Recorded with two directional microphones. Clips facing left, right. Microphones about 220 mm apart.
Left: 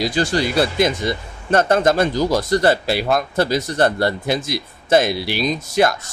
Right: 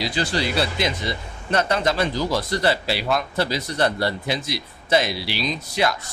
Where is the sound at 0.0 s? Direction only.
45° left (ahead or behind).